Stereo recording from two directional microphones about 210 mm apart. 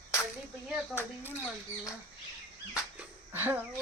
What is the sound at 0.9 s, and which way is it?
Speech, 10° left (ahead or behind).